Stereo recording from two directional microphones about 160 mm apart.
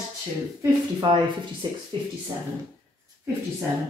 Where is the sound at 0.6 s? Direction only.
30° right (ahead or behind).